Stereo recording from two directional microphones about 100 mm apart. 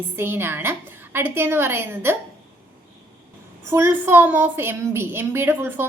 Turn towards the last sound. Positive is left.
turn(degrees=-20)  # may be behind; listen again after turning